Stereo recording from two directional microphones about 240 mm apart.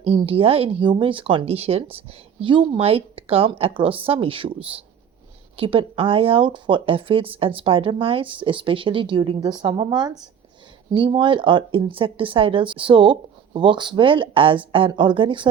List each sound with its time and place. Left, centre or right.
0.0 s speech: right
5.5 s speech: right